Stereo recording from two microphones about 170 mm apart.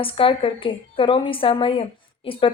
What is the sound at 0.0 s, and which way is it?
A woman's voice, 30° left (ahead or behind).